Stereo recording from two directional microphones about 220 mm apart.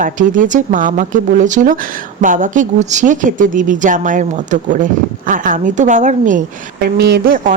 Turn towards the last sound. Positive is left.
turn(degrees=-40)  # may be behind; listen again after turning